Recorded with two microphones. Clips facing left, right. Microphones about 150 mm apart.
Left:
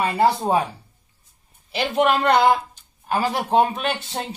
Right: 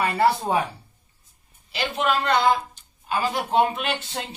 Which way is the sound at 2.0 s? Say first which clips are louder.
Left 5 dB; 55° left (ahead or behind).